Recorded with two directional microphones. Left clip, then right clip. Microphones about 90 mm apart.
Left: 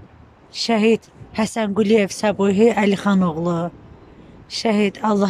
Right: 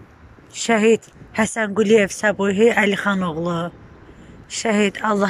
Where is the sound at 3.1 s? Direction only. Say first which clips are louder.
Left 1 dB; 55° left (ahead or behind).